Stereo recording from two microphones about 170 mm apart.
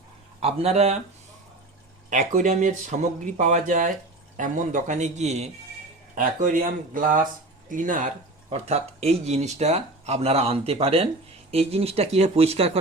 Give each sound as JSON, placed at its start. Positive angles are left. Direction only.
{"t": 0.3, "sound": "speech", "side_deg": -35}
{"t": 2.0, "sound": "speech", "side_deg": -50}
{"t": 6.1, "sound": "speech", "side_deg": -50}
{"t": 8.4, "sound": "speech", "side_deg": -40}